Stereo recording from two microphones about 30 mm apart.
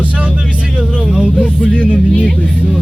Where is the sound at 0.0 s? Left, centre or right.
Right.